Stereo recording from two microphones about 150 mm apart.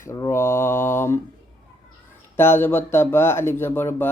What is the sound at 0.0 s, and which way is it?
Mantra, 20° left (ahead or behind).